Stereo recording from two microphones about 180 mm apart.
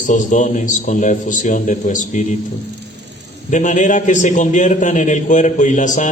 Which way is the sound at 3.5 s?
45° left (ahead or behind).